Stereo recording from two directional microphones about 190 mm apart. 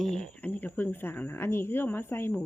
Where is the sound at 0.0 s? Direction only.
5° left (ahead or behind).